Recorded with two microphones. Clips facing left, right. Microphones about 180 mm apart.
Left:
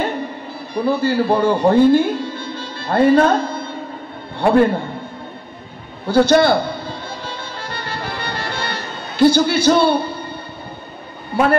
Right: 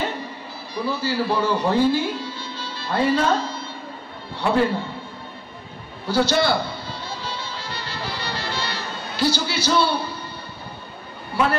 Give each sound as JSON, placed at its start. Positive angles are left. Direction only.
{"t": 0.7, "sound": "a man's voice", "side_deg": 55}
{"t": 6.0, "sound": "music", "side_deg": 55}